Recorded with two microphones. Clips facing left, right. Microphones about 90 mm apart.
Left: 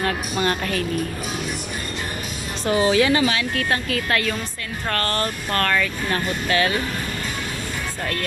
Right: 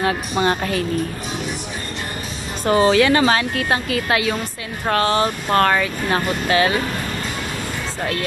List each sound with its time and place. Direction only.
0.0 s speech: 25° right (ahead or behind)
2.6 s speech: 50° right (ahead or behind)
2.9 s speech: 65° right (ahead or behind)
3.5 s speech: 20° right (ahead or behind)